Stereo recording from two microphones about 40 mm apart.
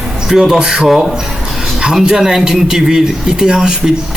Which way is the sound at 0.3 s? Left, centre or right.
Centre.